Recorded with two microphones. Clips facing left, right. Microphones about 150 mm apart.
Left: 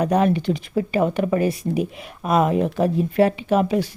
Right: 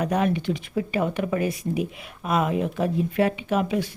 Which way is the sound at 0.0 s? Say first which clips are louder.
Left 5 dB; 35° left (ahead or behind).